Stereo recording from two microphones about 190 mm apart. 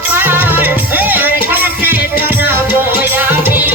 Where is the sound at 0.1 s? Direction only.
10° right (ahead or behind).